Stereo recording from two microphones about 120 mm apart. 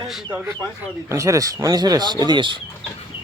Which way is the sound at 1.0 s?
25° right (ahead or behind).